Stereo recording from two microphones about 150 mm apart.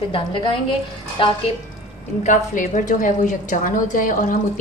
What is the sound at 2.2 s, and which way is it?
A woman's voice, 60° left (ahead or behind).